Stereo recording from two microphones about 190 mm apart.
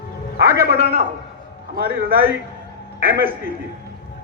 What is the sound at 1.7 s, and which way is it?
Speech, 55° right (ahead or behind).